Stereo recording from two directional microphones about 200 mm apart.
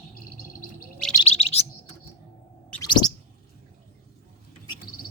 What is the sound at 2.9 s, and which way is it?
Chirp, 20° left (ahead or behind).